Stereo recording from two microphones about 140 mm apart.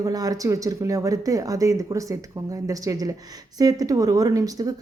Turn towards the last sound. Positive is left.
turn(degrees=-25)  # may be behind; listen again after turning